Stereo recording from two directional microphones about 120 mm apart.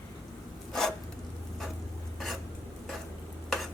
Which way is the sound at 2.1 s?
Centre (ahead or behind).